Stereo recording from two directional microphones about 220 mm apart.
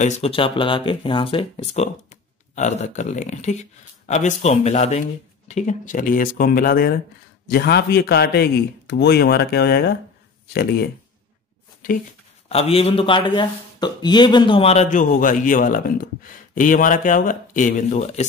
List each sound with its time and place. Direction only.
0.0 s speech: 30° left (ahead or behind); by 10.9 s 45° left (ahead or behind)
12.4 s speech: 30° left (ahead or behind)